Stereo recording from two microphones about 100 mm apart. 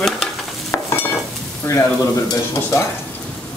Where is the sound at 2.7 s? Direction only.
30° left (ahead or behind).